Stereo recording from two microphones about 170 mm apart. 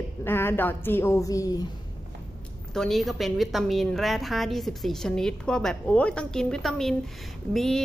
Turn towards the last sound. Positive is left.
turn(degrees=0)  # may be behind; listen again after turning